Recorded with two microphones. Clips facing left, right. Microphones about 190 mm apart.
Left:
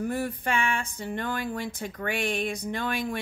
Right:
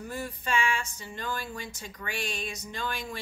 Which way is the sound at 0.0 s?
55° left (ahead or behind).